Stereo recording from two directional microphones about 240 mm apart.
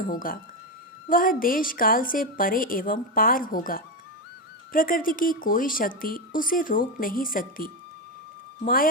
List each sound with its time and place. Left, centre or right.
0.0 s speech: left